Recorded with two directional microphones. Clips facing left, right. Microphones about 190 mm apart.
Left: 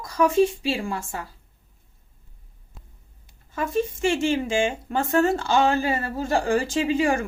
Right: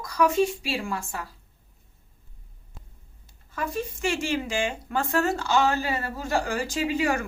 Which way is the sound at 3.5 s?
20° left (ahead or behind).